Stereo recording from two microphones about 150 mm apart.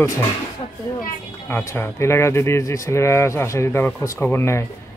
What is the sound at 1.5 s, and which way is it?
Speech, 15° left (ahead or behind).